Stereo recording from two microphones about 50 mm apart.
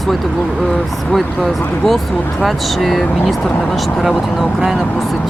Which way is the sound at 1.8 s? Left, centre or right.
Centre.